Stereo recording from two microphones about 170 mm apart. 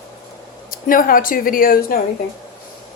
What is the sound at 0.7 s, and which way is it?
Speech, 55° left (ahead or behind).